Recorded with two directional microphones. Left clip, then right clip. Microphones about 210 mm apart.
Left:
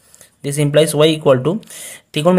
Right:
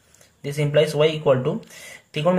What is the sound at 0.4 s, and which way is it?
A man's voice, 40° left (ahead or behind).